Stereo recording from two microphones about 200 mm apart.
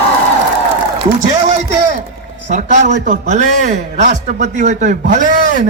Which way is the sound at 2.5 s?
35° right (ahead or behind).